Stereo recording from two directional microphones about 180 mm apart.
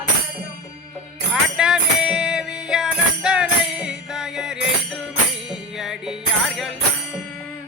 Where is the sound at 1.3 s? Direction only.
5° right (ahead or behind).